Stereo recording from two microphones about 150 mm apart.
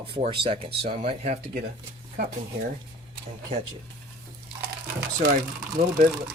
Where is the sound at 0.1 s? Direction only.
35° right (ahead or behind).